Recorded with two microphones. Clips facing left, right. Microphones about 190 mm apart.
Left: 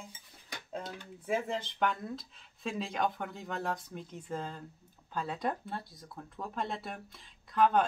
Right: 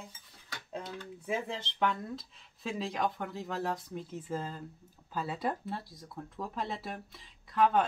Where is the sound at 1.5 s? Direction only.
Centre (ahead or behind).